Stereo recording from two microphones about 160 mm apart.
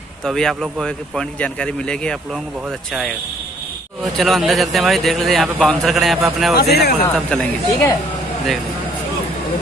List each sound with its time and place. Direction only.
0.2 s a man's voice: 5° left (ahead or behind)
4.2 s a man's voice: centre (ahead or behind)
6.5 s speech: 85° left
7.0 s speech: 10° left (ahead or behind)